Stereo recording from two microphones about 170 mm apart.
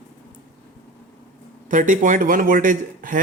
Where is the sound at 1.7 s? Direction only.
50° right (ahead or behind).